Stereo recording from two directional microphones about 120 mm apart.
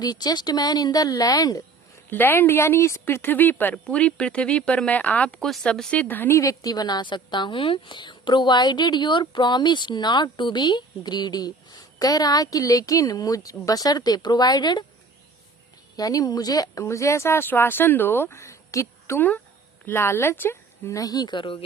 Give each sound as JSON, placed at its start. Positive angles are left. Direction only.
{"t": 0.0, "sound": "a woman's voice", "side_deg": 35}
{"t": 2.0, "sound": "a woman's voice", "side_deg": 15}
{"t": 16.0, "sound": "speech", "side_deg": 30}